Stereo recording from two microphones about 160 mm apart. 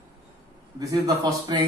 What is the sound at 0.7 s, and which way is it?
Speech, 25° right (ahead or behind).